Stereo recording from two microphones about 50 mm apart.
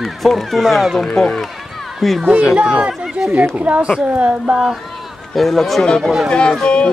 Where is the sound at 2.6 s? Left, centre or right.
Centre.